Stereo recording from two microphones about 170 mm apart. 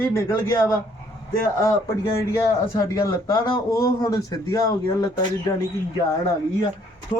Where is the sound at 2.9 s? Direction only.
20° left (ahead or behind).